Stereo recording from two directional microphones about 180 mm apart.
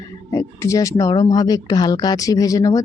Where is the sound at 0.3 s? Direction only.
15° left (ahead or behind).